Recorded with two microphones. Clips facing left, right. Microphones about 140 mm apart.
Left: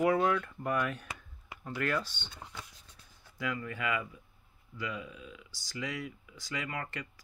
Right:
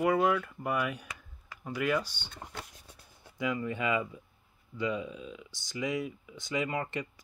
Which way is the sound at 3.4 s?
20° right (ahead or behind).